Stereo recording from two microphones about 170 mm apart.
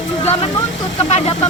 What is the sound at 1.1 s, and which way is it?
Speech, 35° left (ahead or behind).